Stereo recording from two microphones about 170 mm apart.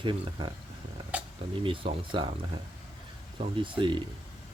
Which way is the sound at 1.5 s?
30° right (ahead or behind).